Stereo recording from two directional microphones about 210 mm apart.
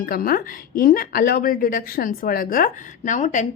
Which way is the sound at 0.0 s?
45° left (ahead or behind).